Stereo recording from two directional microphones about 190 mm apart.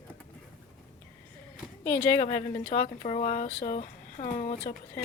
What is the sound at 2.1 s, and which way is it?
Speech, 30° left (ahead or behind).